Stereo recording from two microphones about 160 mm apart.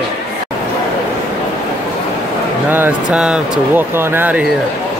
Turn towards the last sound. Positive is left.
turn(degrees=-10)  # may be behind; listen again after turning